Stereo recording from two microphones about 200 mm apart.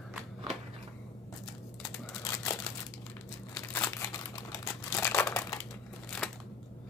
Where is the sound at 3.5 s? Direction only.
15° left (ahead or behind).